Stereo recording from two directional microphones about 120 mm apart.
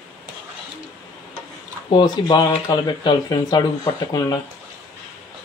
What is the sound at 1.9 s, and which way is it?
Speech, 40° left (ahead or behind).